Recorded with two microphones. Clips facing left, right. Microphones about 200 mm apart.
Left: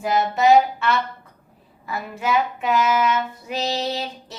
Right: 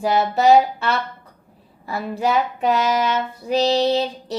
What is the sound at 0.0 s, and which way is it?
A woman's voice, 35° right (ahead or behind).